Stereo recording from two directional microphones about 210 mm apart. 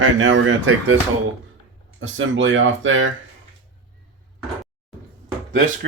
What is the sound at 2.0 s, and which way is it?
Speech, 65° right (ahead or behind).